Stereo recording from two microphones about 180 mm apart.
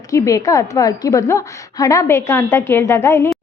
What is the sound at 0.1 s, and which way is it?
A woman's voice, 20° left (ahead or behind).